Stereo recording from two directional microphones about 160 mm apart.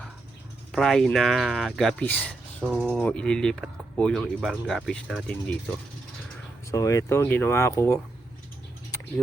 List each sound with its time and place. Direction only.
0.7 s speech: centre (ahead or behind)
2.7 s speech: 5° right (ahead or behind)
3.0 s speech: 5° left (ahead or behind)
6.7 s speech: 20° left (ahead or behind)